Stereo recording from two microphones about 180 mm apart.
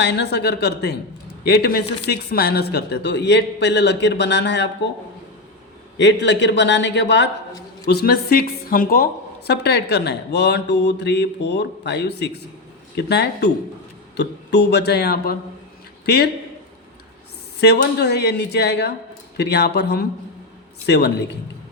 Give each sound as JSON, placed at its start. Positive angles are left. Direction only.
{"t": 0.0, "sound": "speech", "side_deg": 70}
{"t": 6.0, "sound": "a man's voice", "side_deg": 80}
{"t": 7.9, "sound": "speech", "side_deg": 60}
{"t": 9.5, "sound": "speech", "side_deg": 70}
{"t": 17.6, "sound": "speech", "side_deg": 70}